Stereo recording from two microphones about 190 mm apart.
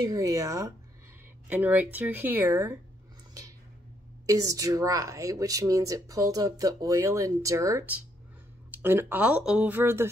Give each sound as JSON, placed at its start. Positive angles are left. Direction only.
{"t": 0.0, "sound": "speech", "side_deg": -20}
{"t": 4.3, "sound": "speech", "side_deg": -15}